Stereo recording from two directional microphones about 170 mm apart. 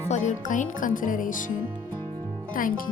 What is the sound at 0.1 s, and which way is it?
Speech, 45° left (ahead or behind).